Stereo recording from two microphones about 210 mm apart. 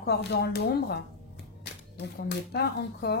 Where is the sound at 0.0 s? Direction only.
50° left (ahead or behind).